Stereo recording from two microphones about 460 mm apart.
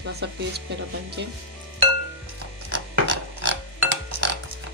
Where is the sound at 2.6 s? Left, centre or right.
Right.